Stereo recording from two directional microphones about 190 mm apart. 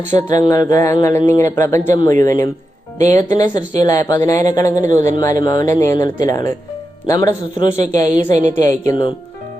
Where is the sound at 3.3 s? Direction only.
20° left (ahead or behind).